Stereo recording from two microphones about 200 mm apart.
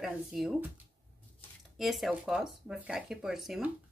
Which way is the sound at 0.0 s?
Centre (ahead or behind).